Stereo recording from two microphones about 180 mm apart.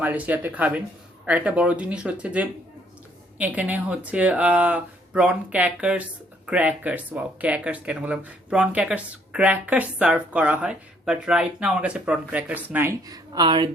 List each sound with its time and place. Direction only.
0.0 s speech: 10° right (ahead or behind); by 13.7 s 25° right (ahead or behind)